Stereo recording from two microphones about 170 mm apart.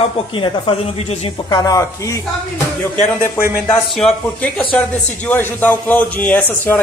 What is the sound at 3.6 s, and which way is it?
Speech, 5° left (ahead or behind).